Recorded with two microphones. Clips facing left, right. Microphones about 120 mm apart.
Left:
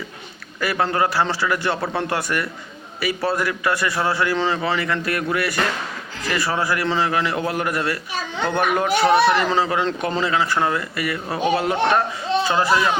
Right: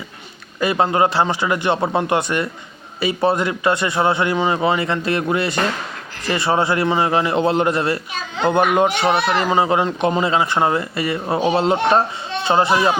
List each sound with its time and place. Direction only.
0.6 s a man's voice: 20° right (ahead or behind)